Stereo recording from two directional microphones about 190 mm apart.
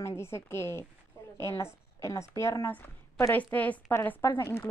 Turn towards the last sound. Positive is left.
turn(degrees=10)  # may be behind; listen again after turning